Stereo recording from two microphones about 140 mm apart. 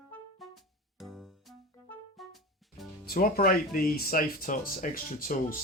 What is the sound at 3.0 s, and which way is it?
Speech, 90° left.